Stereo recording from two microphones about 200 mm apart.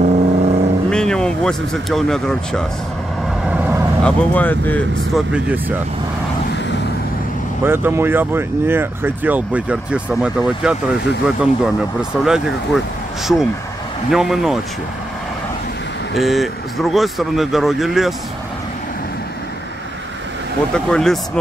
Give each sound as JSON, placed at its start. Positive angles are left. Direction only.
{"t": 0.0, "sound": "vehicle", "side_deg": -40}
{"t": 0.8, "sound": "speech", "side_deg": 5}
{"t": 3.4, "sound": "vehicle", "side_deg": -5}
{"t": 4.0, "sound": "speech", "side_deg": 10}
{"t": 5.3, "sound": "speech", "side_deg": -5}
{"t": 7.6, "sound": "speech", "side_deg": -10}
{"t": 14.1, "sound": "speech", "side_deg": 0}
{"t": 16.2, "sound": "speech", "side_deg": 0}
{"t": 20.7, "sound": "speech", "side_deg": 5}